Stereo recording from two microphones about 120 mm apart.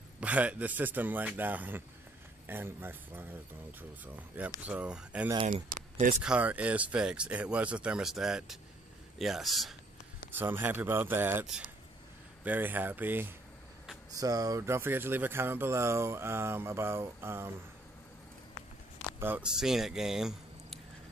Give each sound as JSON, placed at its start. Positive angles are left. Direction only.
{"t": 0.2, "sound": "speech", "side_deg": -10}
{"t": 4.6, "sound": "a man's voice", "side_deg": -10}
{"t": 10.3, "sound": "speech", "side_deg": -15}
{"t": 12.4, "sound": "speech", "side_deg": -15}
{"t": 14.2, "sound": "speech", "side_deg": -30}
{"t": 19.1, "sound": "a sound", "side_deg": -15}
{"t": 19.4, "sound": "speech", "side_deg": -5}